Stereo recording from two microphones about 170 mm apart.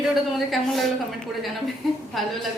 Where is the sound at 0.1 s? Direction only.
Centre (ahead or behind).